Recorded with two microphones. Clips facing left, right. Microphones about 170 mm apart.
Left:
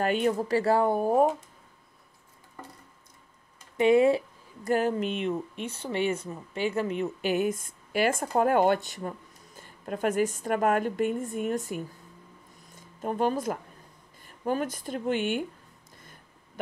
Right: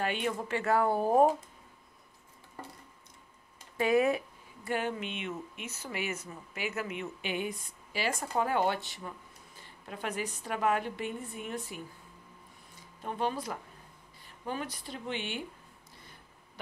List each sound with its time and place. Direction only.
0.0 s speech: 40° left (ahead or behind)
0.8 s speech: 15° left (ahead or behind)
3.7 s speech: 25° left (ahead or behind)
4.6 s a woman's voice: 40° left (ahead or behind)